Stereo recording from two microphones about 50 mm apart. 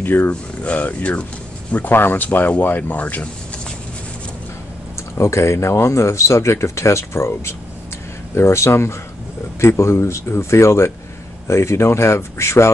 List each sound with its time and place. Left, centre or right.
0.0 s speech: left
0.3 s speech: left
5.1 s speech: left